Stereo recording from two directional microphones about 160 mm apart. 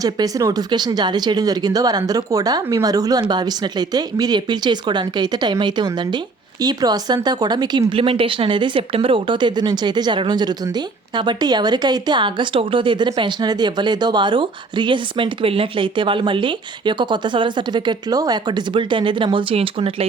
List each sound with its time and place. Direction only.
0.0 s speech: 20° right (ahead or behind); by 20.1 s 35° right (ahead or behind)